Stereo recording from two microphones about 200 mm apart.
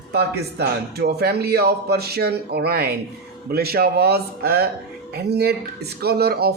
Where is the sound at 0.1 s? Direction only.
55° right (ahead or behind).